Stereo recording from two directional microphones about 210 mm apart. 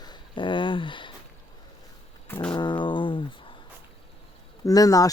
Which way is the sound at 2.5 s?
20° left (ahead or behind).